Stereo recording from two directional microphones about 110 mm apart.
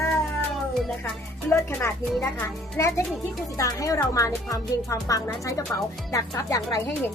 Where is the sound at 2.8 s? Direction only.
25° left (ahead or behind).